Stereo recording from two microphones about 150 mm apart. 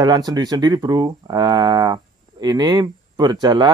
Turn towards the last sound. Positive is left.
turn(degrees=-25)  # may be behind; listen again after turning